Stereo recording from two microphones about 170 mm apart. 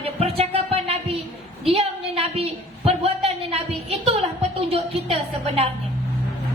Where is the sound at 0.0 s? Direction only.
35° right (ahead or behind).